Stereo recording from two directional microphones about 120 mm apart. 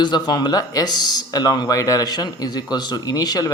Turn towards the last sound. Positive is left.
turn(degrees=30)  # may be behind; listen again after turning